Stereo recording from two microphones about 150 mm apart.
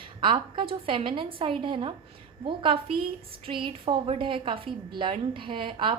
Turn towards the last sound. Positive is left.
turn(degrees=-35)  # may be behind; listen again after turning